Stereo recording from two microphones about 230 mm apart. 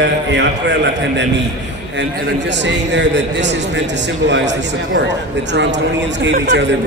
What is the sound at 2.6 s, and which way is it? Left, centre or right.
Speech, right.